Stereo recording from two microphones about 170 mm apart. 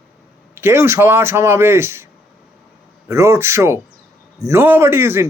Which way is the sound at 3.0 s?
15° right (ahead or behind).